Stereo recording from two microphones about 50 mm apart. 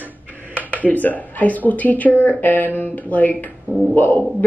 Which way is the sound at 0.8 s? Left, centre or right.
Left.